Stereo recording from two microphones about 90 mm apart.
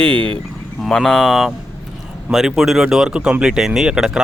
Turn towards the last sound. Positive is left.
turn(degrees=-10)  # may be behind; listen again after turning